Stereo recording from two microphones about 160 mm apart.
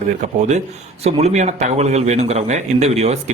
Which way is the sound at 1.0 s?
40° right (ahead or behind).